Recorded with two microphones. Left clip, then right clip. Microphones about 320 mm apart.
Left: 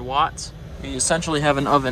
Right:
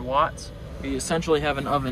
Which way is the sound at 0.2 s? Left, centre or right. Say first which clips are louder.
Left 3 dB; centre.